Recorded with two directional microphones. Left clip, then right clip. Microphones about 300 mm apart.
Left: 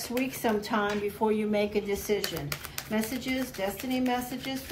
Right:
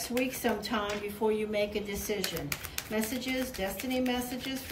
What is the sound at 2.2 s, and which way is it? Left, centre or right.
Speech, centre.